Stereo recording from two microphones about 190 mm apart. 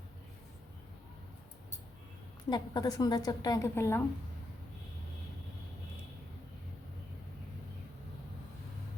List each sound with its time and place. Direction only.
2.5 s a woman's voice: 20° left (ahead or behind)